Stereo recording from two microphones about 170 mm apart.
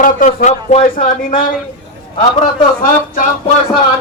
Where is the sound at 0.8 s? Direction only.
55° left (ahead or behind).